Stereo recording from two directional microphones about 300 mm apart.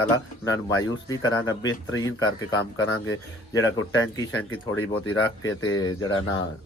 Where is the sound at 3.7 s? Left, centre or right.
Left.